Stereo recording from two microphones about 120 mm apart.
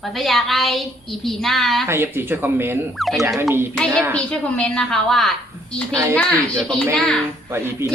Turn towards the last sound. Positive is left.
turn(degrees=-20)  # may be behind; listen again after turning